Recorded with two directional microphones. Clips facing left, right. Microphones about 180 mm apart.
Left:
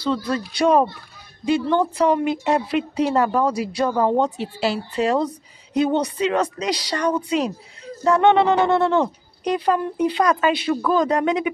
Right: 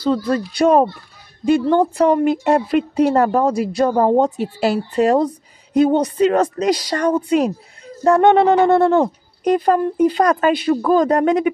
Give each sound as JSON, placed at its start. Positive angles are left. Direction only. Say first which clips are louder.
{"t": 0.0, "sound": "speech", "louder": "right 5 dB", "side_deg": -45}